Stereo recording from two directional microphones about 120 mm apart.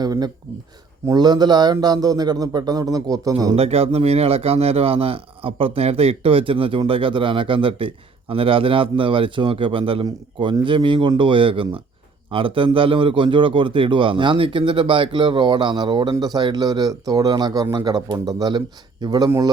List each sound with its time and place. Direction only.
0.0 s a sound: 35° right (ahead or behind)
1.0 s speech: 35° right (ahead or behind)
3.5 s speech: 55° right (ahead or behind); by 19.3 s 35° right (ahead or behind)